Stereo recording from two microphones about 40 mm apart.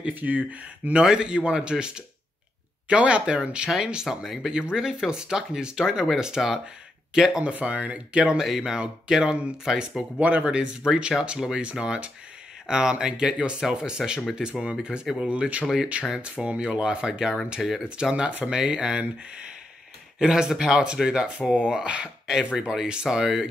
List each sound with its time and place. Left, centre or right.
0.1 s speech: right
1.0 s speech: right; by 4.5 s centre
4.5 s speech: centre
7.4 s speech: right
8.1 s speech: right
8.4 s speech: centre
8.7 s speech: right
10.2 s speech: right; by 17.8 s centre
18.3 s speech: right; by 23.4 s centre